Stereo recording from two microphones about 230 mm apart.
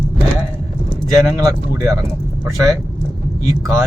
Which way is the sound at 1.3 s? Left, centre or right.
Centre.